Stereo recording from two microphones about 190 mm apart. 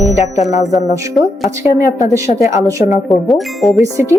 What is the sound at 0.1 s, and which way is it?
Music, 35° left (ahead or behind).